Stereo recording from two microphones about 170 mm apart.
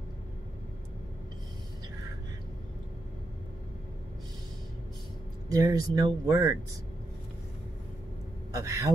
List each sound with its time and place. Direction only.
5.5 s speech: 20° right (ahead or behind)
8.5 s speech: 20° right (ahead or behind)